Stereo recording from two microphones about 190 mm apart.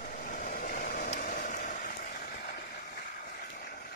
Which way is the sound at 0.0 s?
45° left (ahead or behind).